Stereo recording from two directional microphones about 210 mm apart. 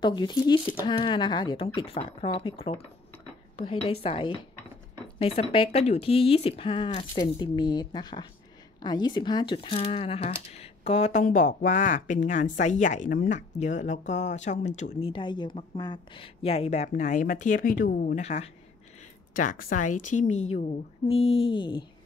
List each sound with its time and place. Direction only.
0.0 s speech: 20° left (ahead or behind)